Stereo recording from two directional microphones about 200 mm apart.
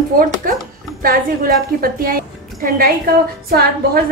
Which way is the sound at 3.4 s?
50° right (ahead or behind).